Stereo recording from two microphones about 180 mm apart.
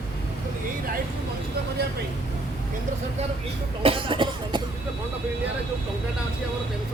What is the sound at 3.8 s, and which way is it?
Cough, 30° right (ahead or behind).